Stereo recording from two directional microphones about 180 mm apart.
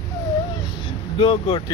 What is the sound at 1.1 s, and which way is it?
Speech, 30° left (ahead or behind).